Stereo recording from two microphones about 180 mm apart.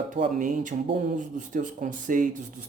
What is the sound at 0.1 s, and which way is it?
Speech, 45° right (ahead or behind).